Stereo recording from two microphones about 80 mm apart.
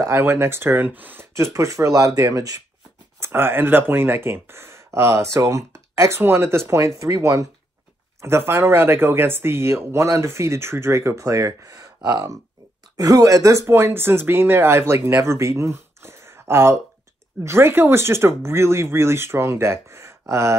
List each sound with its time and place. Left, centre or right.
0.1 s speech: right
1.3 s speech: right
3.2 s speech: right
13.7 s speech: right